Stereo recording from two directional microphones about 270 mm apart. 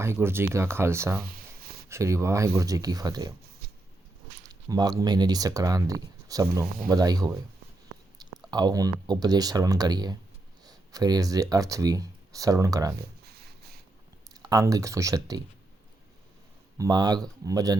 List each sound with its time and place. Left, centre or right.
0.0 s speech: centre
1.2 s a sound: right
1.9 s speech: centre
4.4 s speech: centre
8.4 s speech: centre
13.2 s a sound: right
14.5 s speech: centre
16.7 s speech: centre